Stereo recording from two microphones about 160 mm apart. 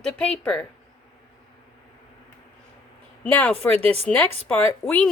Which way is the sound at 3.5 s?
40° right (ahead or behind).